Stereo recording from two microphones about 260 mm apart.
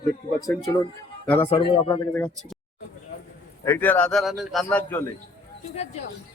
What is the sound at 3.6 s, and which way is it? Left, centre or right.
A man's voice, centre.